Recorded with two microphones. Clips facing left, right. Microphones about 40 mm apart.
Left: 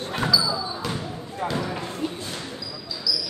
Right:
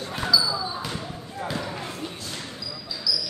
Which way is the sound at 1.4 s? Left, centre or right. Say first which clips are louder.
Left 4 dB; left.